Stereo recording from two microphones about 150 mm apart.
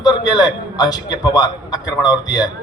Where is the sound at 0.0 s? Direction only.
30° left (ahead or behind).